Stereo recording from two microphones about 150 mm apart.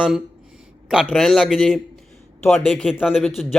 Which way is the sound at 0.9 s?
5° right (ahead or behind).